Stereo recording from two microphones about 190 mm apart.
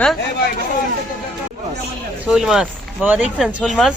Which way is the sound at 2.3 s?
5° right (ahead or behind).